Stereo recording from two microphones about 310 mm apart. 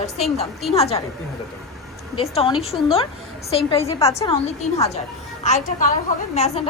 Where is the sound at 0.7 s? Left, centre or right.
Centre.